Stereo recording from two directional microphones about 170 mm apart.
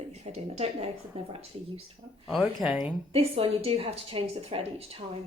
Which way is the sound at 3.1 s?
35° right (ahead or behind).